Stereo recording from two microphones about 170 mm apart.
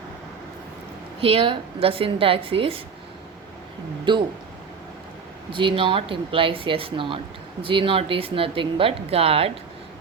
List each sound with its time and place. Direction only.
1.2 s speech: 35° right (ahead or behind)
4.1 s speech: 30° right (ahead or behind)
5.5 s speech: 30° right (ahead or behind)